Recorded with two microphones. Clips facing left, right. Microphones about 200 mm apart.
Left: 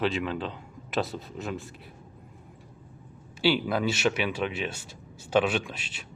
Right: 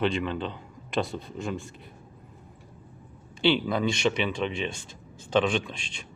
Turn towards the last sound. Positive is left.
turn(degrees=5)  # may be behind; listen again after turning